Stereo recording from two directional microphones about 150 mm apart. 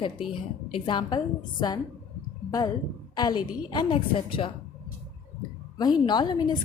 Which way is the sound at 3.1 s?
30° left (ahead or behind).